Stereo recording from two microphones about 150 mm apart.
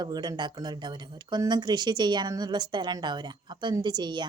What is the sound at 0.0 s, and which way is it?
A woman's voice, 30° right (ahead or behind).